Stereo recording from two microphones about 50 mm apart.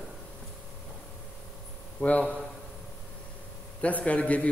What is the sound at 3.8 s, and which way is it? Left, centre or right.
Speech, left.